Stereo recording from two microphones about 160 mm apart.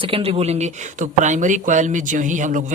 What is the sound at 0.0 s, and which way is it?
Speech, 35° right (ahead or behind).